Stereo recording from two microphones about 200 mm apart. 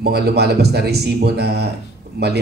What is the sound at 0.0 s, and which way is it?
Speech, 55° right (ahead or behind).